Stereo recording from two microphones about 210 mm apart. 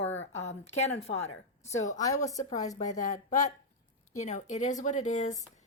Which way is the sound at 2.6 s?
35° left (ahead or behind).